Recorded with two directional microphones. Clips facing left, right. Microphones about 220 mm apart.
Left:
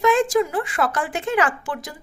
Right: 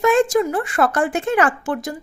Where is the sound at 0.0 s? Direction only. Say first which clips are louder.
Right 2 dB; 45° right (ahead or behind).